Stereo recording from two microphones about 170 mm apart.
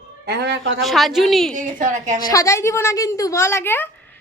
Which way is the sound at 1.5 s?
50° right (ahead or behind).